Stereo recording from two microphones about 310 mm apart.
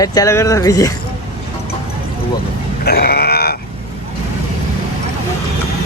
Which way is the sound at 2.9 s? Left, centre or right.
Left.